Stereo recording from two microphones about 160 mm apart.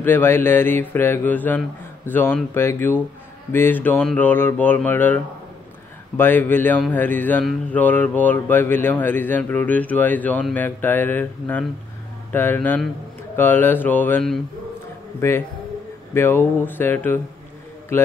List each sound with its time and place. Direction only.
0.0 s speech: 15° left (ahead or behind)